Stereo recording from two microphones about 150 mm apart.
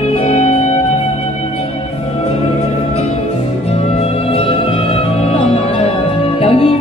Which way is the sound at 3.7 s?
45° left (ahead or behind).